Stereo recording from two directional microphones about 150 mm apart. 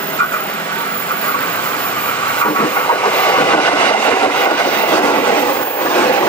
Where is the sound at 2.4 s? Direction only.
25° left (ahead or behind).